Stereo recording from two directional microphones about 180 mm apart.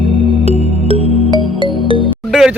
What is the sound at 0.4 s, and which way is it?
Music, 35° right (ahead or behind).